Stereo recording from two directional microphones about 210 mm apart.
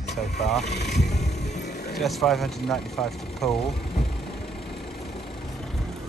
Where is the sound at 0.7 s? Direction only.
55° left (ahead or behind).